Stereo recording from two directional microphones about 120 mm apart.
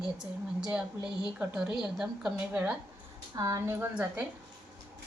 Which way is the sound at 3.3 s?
30° right (ahead or behind).